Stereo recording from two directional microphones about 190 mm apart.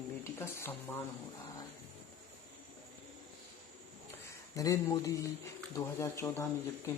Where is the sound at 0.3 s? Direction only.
10° left (ahead or behind).